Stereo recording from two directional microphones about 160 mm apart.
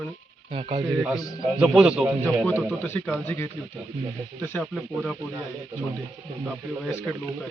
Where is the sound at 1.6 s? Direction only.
5° right (ahead or behind).